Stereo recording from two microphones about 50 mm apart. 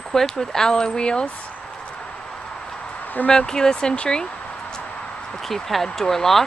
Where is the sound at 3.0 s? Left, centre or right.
Left.